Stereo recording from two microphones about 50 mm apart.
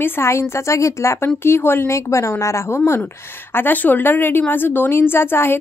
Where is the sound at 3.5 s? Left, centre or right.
Left.